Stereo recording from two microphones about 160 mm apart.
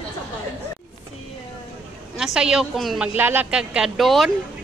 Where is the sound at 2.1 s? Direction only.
5° right (ahead or behind).